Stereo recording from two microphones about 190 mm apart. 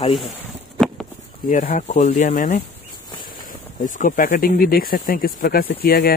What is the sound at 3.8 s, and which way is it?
Speech, 45° left (ahead or behind).